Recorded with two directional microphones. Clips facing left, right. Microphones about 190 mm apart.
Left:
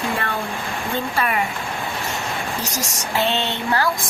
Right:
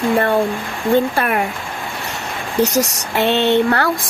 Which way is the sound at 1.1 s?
55° right (ahead or behind).